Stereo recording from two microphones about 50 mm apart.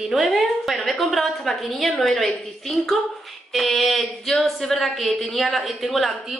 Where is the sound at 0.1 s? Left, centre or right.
Centre.